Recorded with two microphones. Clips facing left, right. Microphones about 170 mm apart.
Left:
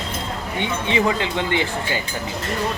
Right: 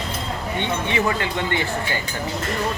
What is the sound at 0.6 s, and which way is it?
Speech, 20° left (ahead or behind).